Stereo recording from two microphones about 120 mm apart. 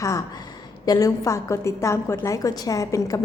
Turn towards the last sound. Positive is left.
turn(degrees=25)  # may be behind; listen again after turning